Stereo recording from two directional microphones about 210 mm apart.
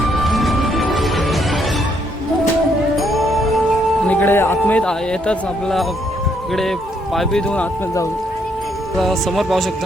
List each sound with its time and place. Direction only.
0.1 s music: centre (ahead or behind)
2.9 s music: centre (ahead or behind)
4.0 s speech: 5° left (ahead or behind)